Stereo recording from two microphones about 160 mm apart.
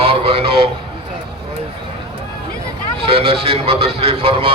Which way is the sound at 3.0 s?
35° right (ahead or behind).